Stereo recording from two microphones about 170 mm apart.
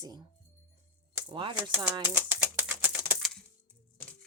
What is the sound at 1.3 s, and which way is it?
Speech, 30° right (ahead or behind).